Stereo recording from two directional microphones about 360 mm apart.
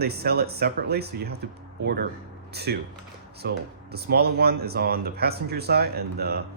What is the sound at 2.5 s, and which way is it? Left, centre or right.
Speech, right.